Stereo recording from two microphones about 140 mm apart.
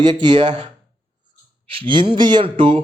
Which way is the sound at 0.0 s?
30° right (ahead or behind).